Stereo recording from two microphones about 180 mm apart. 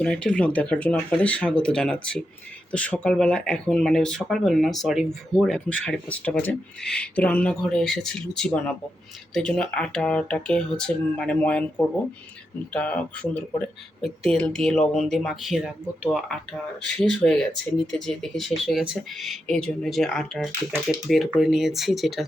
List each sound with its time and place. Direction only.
0.0 s speech: 5° left (ahead or behind)
12.7 s speech: 10° left (ahead or behind)